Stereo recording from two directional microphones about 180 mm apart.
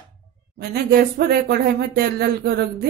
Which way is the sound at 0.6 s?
60° right (ahead or behind).